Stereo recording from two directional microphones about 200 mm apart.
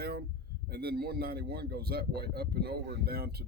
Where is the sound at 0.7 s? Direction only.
50° right (ahead or behind).